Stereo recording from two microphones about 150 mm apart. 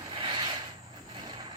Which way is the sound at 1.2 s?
30° right (ahead or behind).